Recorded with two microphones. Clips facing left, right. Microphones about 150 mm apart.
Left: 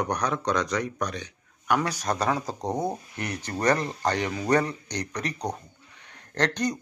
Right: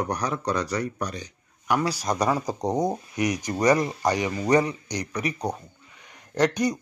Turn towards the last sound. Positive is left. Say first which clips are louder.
# right 4 dB
turn(degrees=-10)  # may be behind; listen again after turning